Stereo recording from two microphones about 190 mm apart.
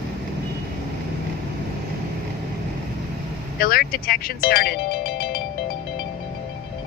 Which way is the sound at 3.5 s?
50° left (ahead or behind).